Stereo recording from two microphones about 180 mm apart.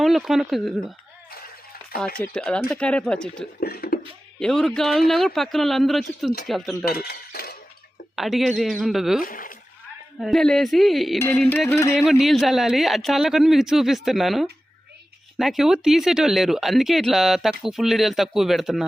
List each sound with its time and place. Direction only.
0.0 s speech: centre (ahead or behind)
2.2 s speech: 5° left (ahead or behind)
3.6 s beatboxing: 60° left (ahead or behind)
4.4 s speech: 5° left (ahead or behind)
6.8 s chink: 60° left (ahead or behind)
8.1 s speech: centre (ahead or behind)
9.2 s speech: 50° left (ahead or behind)
10.2 s speech: centre (ahead or behind)
11.3 s music: 10° left (ahead or behind)
11.9 s speech: centre (ahead or behind)